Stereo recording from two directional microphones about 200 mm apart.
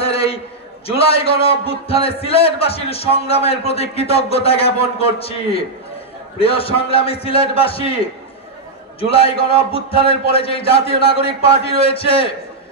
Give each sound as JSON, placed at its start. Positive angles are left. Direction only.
{"t": 0.0, "sound": "a sound", "side_deg": 30}
{"t": 0.8, "sound": "a man's voice", "side_deg": 30}
{"t": 9.1, "sound": "a man's voice", "side_deg": 30}